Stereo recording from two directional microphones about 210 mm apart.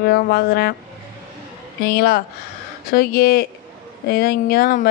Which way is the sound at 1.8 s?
45° left (ahead or behind).